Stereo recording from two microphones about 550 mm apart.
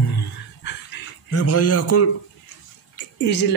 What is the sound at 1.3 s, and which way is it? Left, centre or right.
Speech, left.